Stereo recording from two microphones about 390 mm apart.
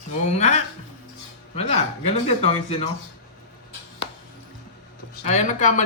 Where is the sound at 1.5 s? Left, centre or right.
Centre.